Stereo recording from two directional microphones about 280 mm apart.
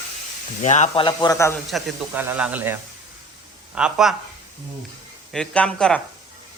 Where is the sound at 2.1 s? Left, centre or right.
Centre.